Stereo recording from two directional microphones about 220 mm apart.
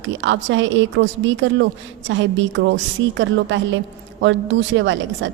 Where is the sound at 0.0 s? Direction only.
60° right (ahead or behind).